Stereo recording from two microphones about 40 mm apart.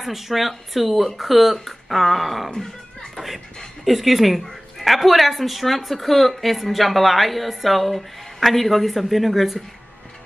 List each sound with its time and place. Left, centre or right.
0.0 s a woman's voice: centre
2.5 s music: left
3.8 s a woman's voice: centre